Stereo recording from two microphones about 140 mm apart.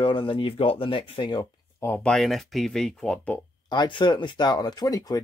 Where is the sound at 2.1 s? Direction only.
Centre (ahead or behind).